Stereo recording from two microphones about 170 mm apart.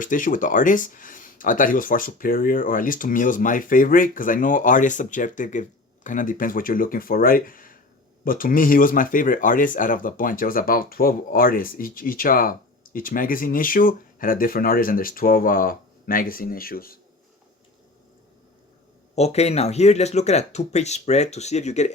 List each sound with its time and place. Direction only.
0.0 s speech: 50° left (ahead or behind)
19.1 s speech: 40° left (ahead or behind)